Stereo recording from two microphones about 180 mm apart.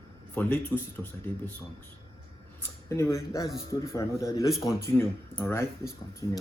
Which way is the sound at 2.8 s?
15° left (ahead or behind).